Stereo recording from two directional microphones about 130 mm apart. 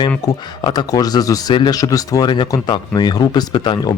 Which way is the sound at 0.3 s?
35° left (ahead or behind).